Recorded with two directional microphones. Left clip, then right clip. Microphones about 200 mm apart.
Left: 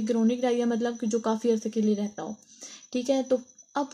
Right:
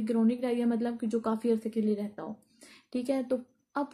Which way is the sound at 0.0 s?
50° left (ahead or behind).